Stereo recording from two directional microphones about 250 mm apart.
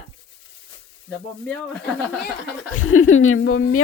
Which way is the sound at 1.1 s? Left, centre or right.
Centre.